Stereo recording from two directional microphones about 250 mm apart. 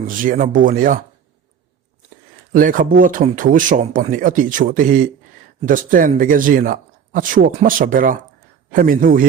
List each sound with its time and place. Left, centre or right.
0.1 s speech: right
2.5 s speech: right